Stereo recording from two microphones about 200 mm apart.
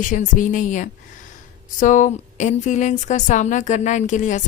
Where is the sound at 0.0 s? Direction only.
40° left (ahead or behind).